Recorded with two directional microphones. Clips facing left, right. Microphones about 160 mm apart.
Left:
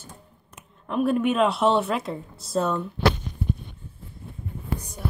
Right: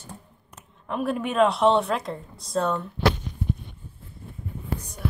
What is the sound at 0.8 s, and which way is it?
Speech, centre (ahead or behind).